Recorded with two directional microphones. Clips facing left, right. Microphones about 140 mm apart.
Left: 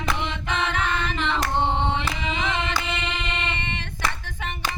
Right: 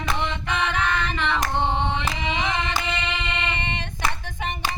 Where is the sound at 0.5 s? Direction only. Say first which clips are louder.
Right 1 dB; 25° left (ahead or behind).